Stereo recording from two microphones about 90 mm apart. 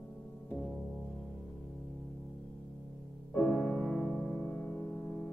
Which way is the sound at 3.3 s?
5° left (ahead or behind).